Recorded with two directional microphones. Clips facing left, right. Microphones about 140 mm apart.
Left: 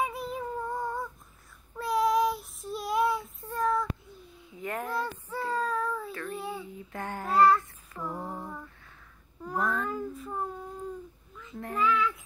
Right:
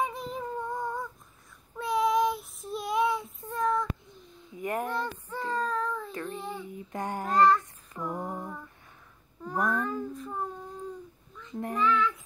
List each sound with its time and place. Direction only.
0.0 s child singing: 10° left (ahead or behind)
4.6 s a sound: 15° right (ahead or behind)
4.9 s child singing: 5° left (ahead or behind)
6.3 s a sound: 10° left (ahead or behind)
6.9 s child singing: 15° right (ahead or behind)
7.2 s child singing: 5° left (ahead or behind)
7.9 s a sound: 15° right (ahead or behind)
9.6 s child singing: 15° right (ahead or behind)
9.8 s child singing: 5° left (ahead or behind)
11.5 s child singing: 20° right (ahead or behind)
11.8 s child singing: 5° left (ahead or behind)